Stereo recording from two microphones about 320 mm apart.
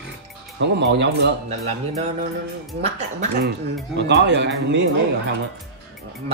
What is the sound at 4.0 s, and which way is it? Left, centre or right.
Speech, right.